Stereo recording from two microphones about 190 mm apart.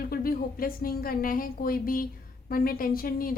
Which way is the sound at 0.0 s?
50° left (ahead or behind).